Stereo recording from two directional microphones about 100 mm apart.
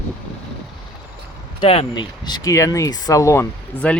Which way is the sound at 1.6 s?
65° left (ahead or behind).